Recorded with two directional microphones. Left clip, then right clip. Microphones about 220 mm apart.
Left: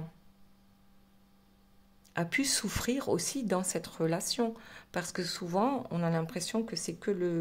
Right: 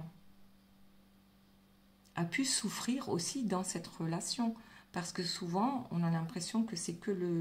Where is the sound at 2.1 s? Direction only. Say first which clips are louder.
Left 5 dB; 45° left (ahead or behind).